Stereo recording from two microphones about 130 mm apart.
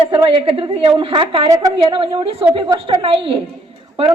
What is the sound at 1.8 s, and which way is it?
A woman's voice, 40° right (ahead or behind).